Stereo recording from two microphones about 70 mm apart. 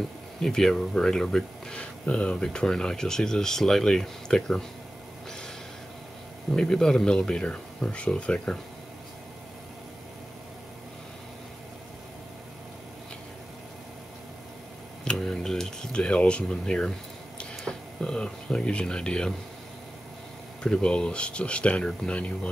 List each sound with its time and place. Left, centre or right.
0.4 s speech: centre
6.5 s speech: centre
15.0 s a sound: centre
17.4 s speech: centre
20.6 s speech: centre